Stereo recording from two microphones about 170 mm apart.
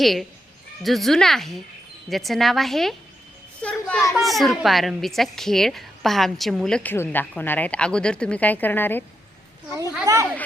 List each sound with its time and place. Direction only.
0.0 s a child's voice: centre (ahead or behind)
3.6 s a sound: 5° left (ahead or behind)
4.1 s a child's voice: centre (ahead or behind)
10.1 s speech: 20° right (ahead or behind)